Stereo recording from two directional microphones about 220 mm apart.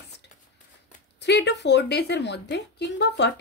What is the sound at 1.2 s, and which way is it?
Speech, 50° left (ahead or behind).